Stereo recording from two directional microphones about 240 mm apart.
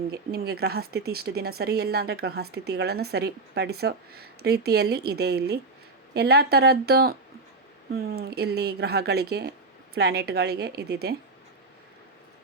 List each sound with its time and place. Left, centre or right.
0.1 s a woman's voice: right